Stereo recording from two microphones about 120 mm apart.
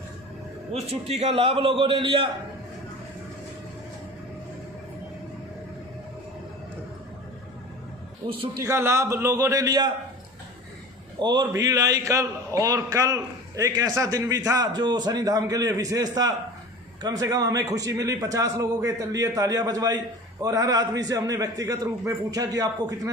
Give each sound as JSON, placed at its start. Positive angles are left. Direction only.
{"t": 0.7, "sound": "a man's voice", "side_deg": -60}
{"t": 8.6, "sound": "a man's voice", "side_deg": -20}
{"t": 11.2, "sound": "a man's voice", "side_deg": -35}